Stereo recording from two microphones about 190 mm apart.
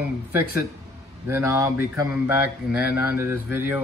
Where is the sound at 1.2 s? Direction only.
15° right (ahead or behind).